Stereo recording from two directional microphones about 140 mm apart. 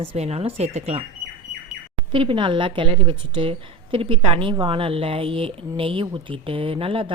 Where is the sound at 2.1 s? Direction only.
40° right (ahead or behind).